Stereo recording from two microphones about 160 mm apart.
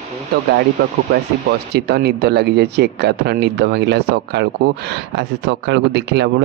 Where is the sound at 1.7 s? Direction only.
90° right.